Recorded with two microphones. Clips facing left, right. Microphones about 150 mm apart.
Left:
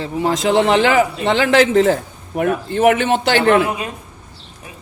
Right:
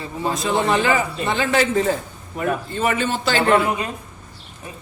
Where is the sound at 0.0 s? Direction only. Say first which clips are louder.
Left 6 dB; 90° left; by 3.4 s 65° left (ahead or behind).